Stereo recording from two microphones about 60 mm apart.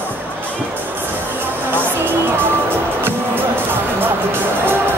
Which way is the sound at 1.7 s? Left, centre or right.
Right.